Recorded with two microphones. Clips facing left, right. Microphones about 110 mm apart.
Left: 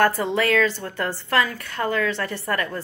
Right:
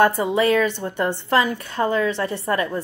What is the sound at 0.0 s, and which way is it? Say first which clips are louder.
A woman's voice: right 3 dB; 20° right (ahead or behind).